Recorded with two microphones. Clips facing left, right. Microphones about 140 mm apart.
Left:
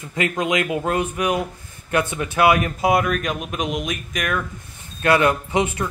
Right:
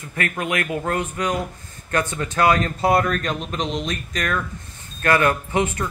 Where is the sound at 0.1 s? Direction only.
15° left (ahead or behind).